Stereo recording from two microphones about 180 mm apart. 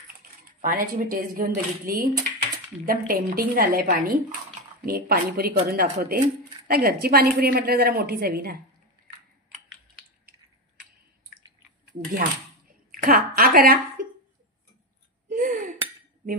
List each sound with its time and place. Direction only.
0.6 s a woman's voice: 50° right (ahead or behind)
12.9 s speech: 50° right (ahead or behind)
15.2 s chink: 45° right (ahead or behind)